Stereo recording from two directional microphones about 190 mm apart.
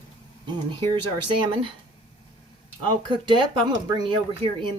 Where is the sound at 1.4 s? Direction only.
30° right (ahead or behind).